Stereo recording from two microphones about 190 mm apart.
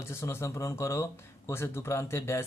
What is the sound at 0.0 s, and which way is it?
Speech, 15° left (ahead or behind).